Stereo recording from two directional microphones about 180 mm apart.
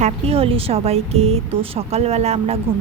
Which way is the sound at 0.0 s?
35° right (ahead or behind).